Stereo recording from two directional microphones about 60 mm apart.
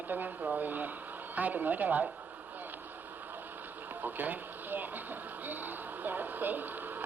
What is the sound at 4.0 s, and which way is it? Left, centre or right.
A woman's voice, right.